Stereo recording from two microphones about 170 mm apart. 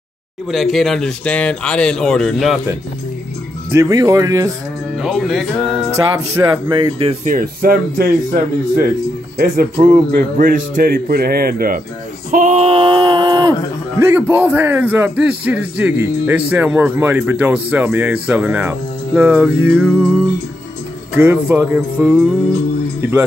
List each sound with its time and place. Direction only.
0.5 s speech: centre (ahead or behind)
3.7 s speech: 20° right (ahead or behind)
4.9 s speech: centre (ahead or behind)
5.9 s speech: 15° right (ahead or behind)
7.2 s speech: 55° right (ahead or behind)
12.3 s speech: 50° right (ahead or behind); by 20.0 s 10° right (ahead or behind)
21.1 s speech: 10° right (ahead or behind)